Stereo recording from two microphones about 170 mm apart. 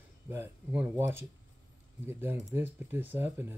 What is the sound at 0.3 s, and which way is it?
Speech, 10° right (ahead or behind).